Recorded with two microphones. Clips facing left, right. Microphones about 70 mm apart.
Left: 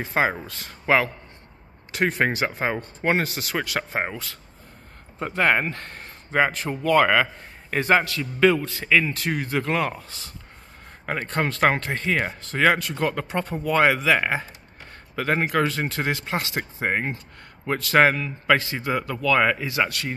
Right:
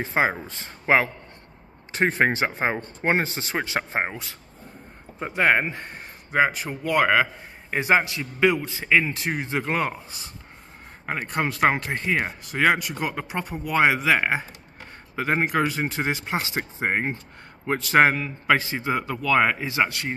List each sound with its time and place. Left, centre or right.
0.0 s a man's voice: right